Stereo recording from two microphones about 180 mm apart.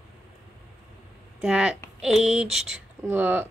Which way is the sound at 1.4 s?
5° right (ahead or behind).